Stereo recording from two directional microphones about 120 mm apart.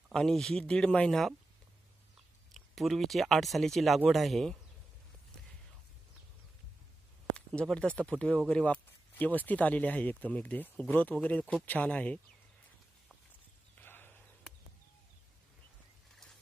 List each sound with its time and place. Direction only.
0.1 s speech: 5° left (ahead or behind)
2.5 s speech: centre (ahead or behind)
7.3 s speech: 10° left (ahead or behind)
13.7 s a sound: 15° left (ahead or behind)